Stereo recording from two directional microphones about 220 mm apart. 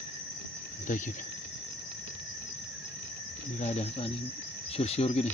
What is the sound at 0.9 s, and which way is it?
Speech, 35° left (ahead or behind).